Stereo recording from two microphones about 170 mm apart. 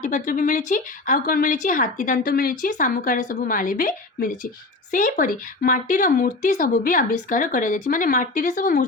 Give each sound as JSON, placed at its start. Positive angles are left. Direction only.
{"t": 0.0, "sound": "speech", "side_deg": 45}